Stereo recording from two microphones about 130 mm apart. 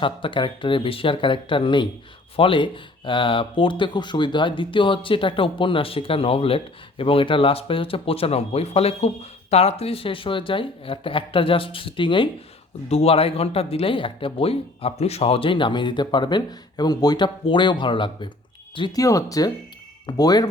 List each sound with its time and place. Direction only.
0.0 s speech: 40° left (ahead or behind)
12.9 s speech: 50° left (ahead or behind)
18.9 s speech: 25° left (ahead or behind)